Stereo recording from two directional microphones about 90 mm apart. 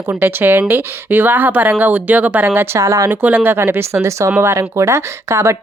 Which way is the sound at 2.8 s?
35° right (ahead or behind).